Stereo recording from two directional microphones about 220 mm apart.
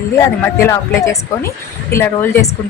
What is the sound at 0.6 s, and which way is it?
A woman's voice, 15° left (ahead or behind).